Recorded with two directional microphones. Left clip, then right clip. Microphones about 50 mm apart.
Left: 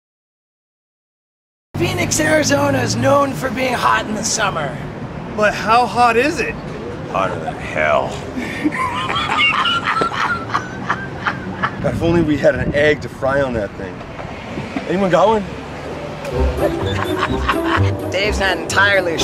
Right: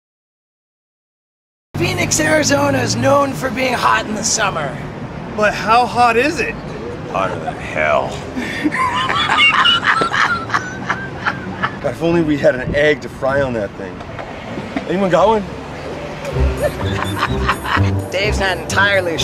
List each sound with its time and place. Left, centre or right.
1.8 s speech: centre
5.3 s speech: centre
8.4 s dog: right
11.3 s a sound: centre
11.6 s speech: centre
15.0 s speech: centre
16.6 s speech: right
17.8 s speech: centre